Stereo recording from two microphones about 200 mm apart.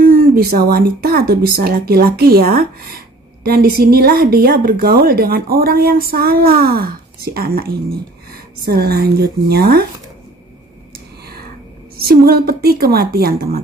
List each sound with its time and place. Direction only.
0.0 s a woman's voice: 45° right (ahead or behind)
12.0 s a woman's voice: 50° right (ahead or behind)